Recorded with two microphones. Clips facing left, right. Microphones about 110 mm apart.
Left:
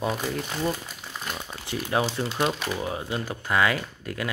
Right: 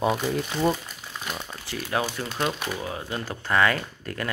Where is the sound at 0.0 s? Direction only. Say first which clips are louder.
Right 3 dB; 5° right (ahead or behind).